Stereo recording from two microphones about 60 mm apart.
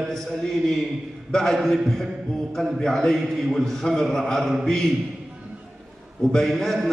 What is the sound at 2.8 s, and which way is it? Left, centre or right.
A man's voice, centre.